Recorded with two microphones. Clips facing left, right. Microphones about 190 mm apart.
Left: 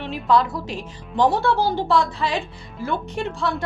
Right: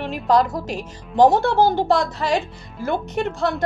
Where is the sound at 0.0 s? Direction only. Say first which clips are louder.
Right 2 dB; 45° right (ahead or behind).